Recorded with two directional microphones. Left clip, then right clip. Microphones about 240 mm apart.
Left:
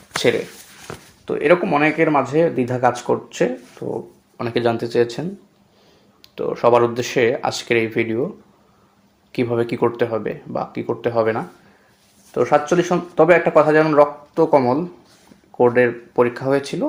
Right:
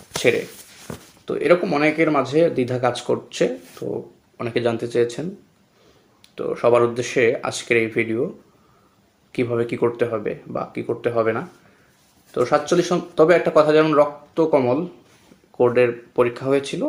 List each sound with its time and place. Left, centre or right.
1.2 s speech: centre
6.2 s speech: left
9.3 s speech: left